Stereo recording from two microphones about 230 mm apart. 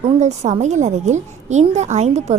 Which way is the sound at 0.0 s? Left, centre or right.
Right.